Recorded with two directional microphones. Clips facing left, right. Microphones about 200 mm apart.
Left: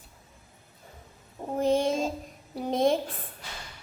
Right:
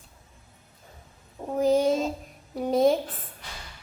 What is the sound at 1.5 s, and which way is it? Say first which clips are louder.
Child singing: right 3 dB; centre (ahead or behind).